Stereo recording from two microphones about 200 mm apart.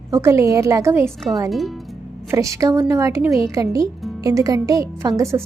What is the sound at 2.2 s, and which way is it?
A woman's voice, 15° right (ahead or behind).